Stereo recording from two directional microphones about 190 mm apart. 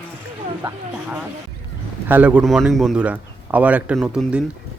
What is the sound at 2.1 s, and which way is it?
A man's voice, 5° right (ahead or behind).